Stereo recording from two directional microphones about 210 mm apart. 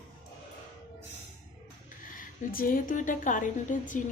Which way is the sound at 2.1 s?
40° left (ahead or behind).